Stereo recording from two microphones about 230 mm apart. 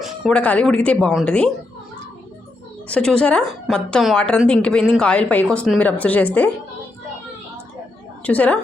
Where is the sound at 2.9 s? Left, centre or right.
Centre.